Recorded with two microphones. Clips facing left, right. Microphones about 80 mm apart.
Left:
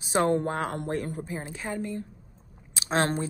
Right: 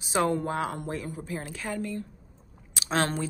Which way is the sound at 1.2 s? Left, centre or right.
Left.